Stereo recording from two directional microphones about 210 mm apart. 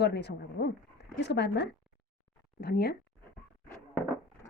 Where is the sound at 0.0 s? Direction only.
50° left (ahead or behind).